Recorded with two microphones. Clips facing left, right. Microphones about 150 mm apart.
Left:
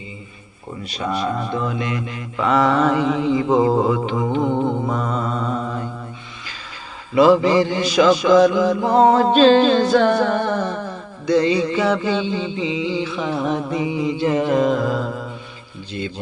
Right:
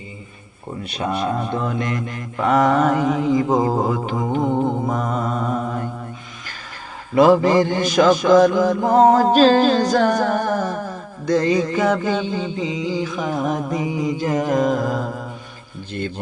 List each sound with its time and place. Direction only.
0.9 s mantra: 55° right (ahead or behind)
7.1 s mantra: 50° right (ahead or behind)
15.9 s mantra: 55° right (ahead or behind)